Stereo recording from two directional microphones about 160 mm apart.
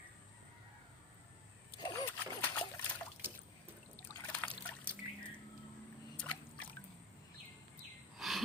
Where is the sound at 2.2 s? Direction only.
10° left (ahead or behind).